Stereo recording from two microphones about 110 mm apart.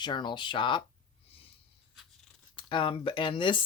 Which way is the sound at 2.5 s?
50° left (ahead or behind).